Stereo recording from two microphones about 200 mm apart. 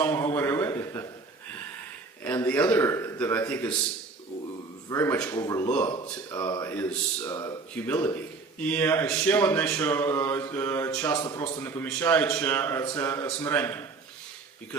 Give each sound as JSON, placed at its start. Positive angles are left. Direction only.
{"t": 0.0, "sound": "a sound", "side_deg": 10}
{"t": 2.2, "sound": "a man's voice", "side_deg": 10}
{"t": 4.9, "sound": "a man's voice", "side_deg": 15}
{"t": 6.7, "sound": "a man's voice", "side_deg": 10}